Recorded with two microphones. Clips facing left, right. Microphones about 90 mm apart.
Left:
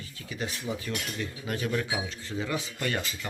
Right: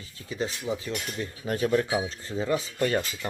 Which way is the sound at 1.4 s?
40° right (ahead or behind).